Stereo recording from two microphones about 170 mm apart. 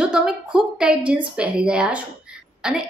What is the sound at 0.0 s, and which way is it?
A woman's voice, 5° right (ahead or behind).